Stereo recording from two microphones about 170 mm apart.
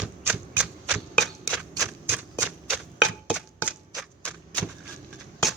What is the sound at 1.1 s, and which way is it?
Shuffling cards, centre (ahead or behind).